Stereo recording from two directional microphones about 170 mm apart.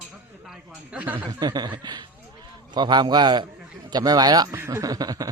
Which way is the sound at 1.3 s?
25° right (ahead or behind).